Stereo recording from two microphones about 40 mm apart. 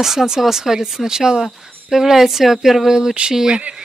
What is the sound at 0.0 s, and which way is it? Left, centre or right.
A woman's voice, centre.